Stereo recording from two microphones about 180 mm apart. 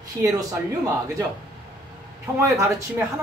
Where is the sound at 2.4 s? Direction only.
15° right (ahead or behind).